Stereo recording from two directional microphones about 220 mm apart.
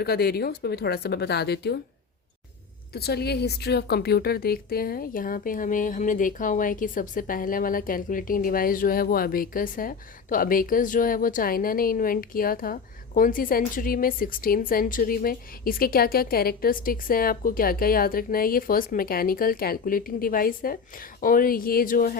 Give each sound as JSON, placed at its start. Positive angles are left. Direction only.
{"t": 0.0, "sound": "speech", "side_deg": 45}
{"t": 2.9, "sound": "a woman's voice", "side_deg": 45}